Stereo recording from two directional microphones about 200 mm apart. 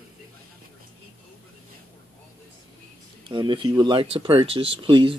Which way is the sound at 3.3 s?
25° right (ahead or behind).